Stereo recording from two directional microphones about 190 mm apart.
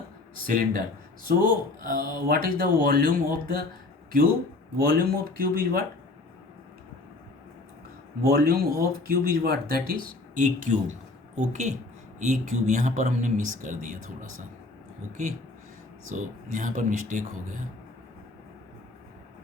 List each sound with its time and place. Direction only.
0.4 s speech: 50° right (ahead or behind)
4.8 s speech: 50° right (ahead or behind)
8.2 s speech: 55° right (ahead or behind)
16.0 s speech: 40° right (ahead or behind)